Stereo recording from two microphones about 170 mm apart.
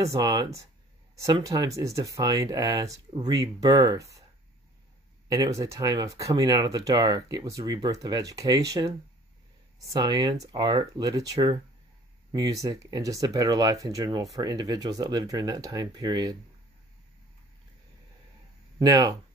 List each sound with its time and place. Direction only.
0.0 s speech: 20° right (ahead or behind)
5.3 s speech: 20° right (ahead or behind)
18.8 s speech: 20° right (ahead or behind)